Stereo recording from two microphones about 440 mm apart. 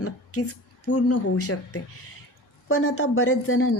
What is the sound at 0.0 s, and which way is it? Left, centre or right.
A woman's voice, left.